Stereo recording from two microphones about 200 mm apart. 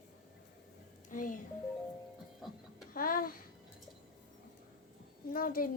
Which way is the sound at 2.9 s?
45° left (ahead or behind).